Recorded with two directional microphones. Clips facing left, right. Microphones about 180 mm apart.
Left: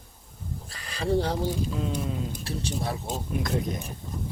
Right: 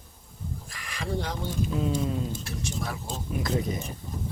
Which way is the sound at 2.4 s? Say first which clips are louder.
Left 3 dB; 30° left (ahead or behind).